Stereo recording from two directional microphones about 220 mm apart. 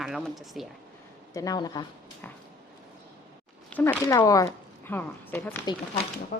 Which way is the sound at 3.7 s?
10° left (ahead or behind).